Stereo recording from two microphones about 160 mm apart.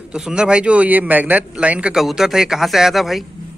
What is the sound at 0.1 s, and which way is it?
Speech, 5° right (ahead or behind).